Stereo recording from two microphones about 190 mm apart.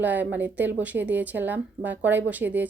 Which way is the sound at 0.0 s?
10° right (ahead or behind).